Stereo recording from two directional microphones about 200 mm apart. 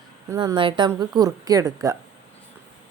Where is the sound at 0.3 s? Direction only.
20° right (ahead or behind).